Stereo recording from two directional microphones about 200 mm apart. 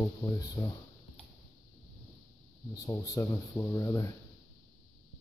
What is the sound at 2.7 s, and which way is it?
Speech, 15° left (ahead or behind).